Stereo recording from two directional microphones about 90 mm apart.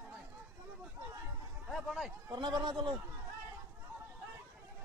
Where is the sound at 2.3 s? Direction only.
55° right (ahead or behind).